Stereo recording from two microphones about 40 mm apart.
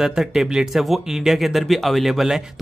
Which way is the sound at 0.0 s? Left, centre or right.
Centre.